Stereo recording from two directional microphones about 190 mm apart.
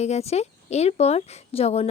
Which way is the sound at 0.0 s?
35° left (ahead or behind).